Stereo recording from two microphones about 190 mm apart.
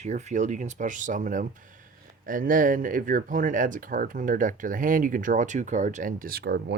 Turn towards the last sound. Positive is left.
turn(degrees=-60)  # may be behind; listen again after turning